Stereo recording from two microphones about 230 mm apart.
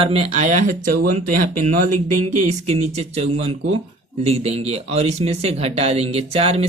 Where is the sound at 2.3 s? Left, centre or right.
Right.